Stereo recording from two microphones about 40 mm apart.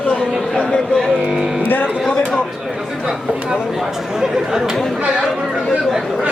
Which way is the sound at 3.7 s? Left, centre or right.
Centre.